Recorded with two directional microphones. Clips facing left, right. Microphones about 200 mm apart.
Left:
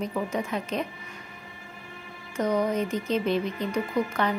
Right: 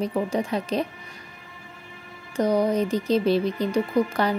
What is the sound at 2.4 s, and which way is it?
Speech, 35° right (ahead or behind).